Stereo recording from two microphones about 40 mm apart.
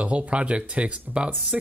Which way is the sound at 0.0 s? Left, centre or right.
Right.